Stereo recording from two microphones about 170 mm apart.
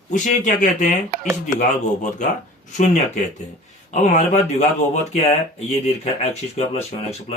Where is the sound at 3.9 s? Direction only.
45° left (ahead or behind).